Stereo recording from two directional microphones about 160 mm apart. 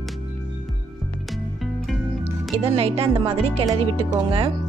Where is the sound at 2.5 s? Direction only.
35° right (ahead or behind).